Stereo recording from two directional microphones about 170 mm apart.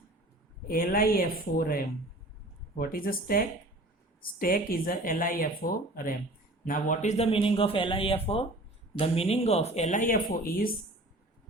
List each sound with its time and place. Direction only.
0.7 s speech: 60° left (ahead or behind)